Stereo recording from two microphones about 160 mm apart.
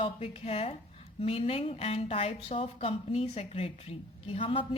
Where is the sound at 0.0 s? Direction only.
35° left (ahead or behind).